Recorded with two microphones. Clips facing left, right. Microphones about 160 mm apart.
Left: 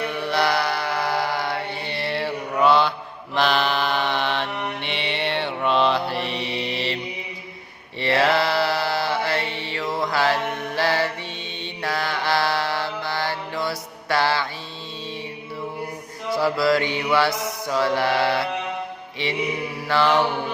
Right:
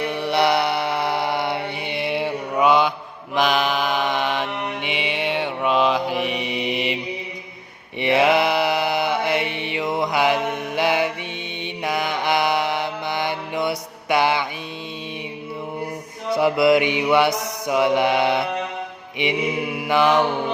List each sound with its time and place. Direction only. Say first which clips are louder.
0.0 s mantra: right 3 dB; 20° right (ahead or behind)
16.3 s mantra: right 4 dB; 20° right (ahead or behind)